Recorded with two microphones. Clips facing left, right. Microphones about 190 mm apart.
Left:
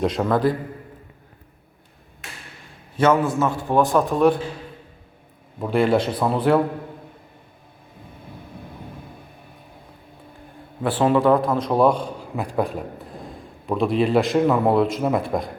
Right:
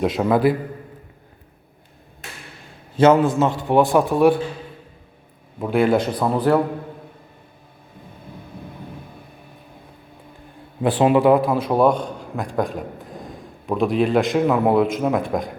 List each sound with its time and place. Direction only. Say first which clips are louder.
0.0 s a man's voice: right 2 dB; 5° right (ahead or behind)
2.9 s a man's voice: right 4 dB; 20° right (ahead or behind)
3.9 s a man's voice: right 1 dB; 5° right (ahead or behind)
5.5 s a man's voice: right 1 dB; centre (ahead or behind)
10.8 s a man's voice: right 2 dB; 15° right (ahead or behind); by 15.5 s centre (ahead or behind)